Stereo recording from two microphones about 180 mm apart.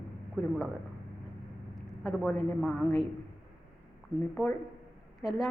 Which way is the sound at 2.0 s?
Centre (ahead or behind).